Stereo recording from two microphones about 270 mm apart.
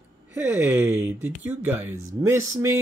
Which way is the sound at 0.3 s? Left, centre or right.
Centre.